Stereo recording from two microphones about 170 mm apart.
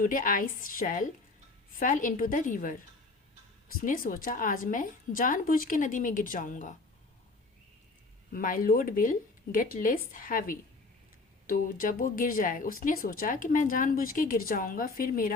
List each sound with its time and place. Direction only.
0.0 s a woman's voice: 55° left (ahead or behind)
8.3 s a woman's voice: 55° left (ahead or behind)